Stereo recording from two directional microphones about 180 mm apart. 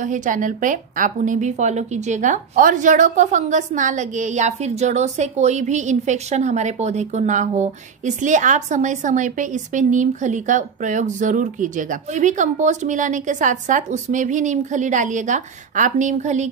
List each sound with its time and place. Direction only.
0.0 s a woman's voice: 45° right (ahead or behind)